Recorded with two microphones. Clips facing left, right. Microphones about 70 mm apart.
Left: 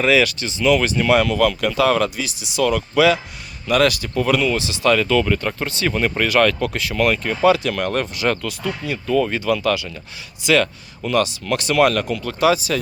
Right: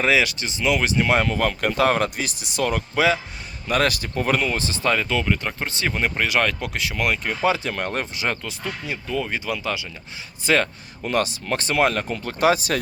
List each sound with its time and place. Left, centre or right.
0.0 s speech: right
4.9 s speech: centre
5.9 s speech: centre
9.0 s speech: centre
10.4 s speech: right